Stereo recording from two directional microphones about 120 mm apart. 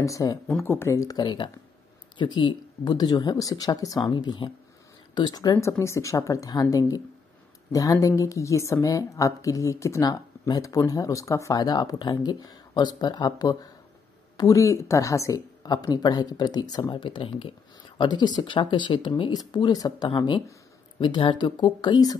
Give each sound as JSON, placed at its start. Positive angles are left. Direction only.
{"t": 0.0, "sound": "a woman's voice", "side_deg": 30}
{"t": 16.9, "sound": "a woman's voice", "side_deg": 45}